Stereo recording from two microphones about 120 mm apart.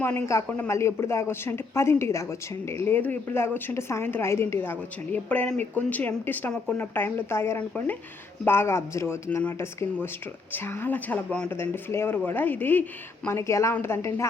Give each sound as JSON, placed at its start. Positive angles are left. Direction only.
{"t": 0.0, "sound": "speech", "side_deg": 20}